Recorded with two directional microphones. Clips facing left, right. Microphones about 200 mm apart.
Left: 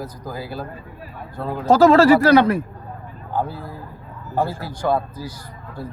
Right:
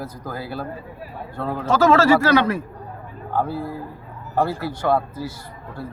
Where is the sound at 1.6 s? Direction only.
35° left (ahead or behind).